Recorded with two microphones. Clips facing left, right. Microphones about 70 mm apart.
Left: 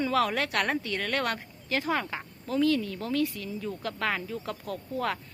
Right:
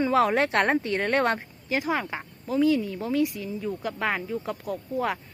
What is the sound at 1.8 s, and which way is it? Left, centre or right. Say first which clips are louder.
Speech: right 2 dB; centre.